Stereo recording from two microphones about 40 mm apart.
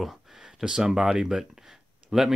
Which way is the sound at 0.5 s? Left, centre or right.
Centre.